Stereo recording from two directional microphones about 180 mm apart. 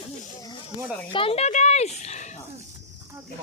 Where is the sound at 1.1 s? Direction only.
30° left (ahead or behind).